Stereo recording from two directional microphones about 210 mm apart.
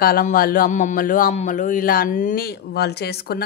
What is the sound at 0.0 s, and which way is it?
A woman's voice, 45° left (ahead or behind).